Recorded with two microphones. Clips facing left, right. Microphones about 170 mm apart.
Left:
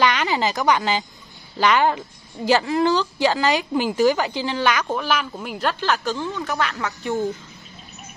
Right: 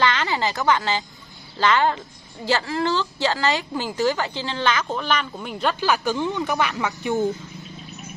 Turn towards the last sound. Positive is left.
turn(degrees=-10)  # may be behind; listen again after turning